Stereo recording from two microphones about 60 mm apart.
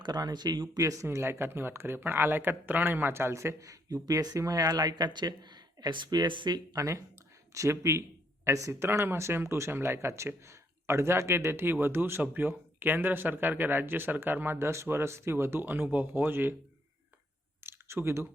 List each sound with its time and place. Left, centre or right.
0.2 s speech: right
1.1 s speech: right
4.0 s speech: right
6.1 s speech: right
6.7 s speech: right
8.7 s speech: right
17.6 s a sound: right